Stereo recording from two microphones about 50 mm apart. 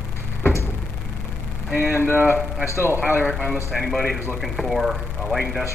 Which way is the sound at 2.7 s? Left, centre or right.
Left.